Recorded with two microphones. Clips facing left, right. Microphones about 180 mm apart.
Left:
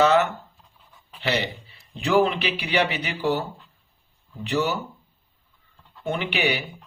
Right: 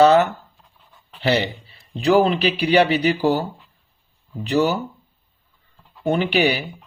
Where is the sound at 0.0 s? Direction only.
35° right (ahead or behind).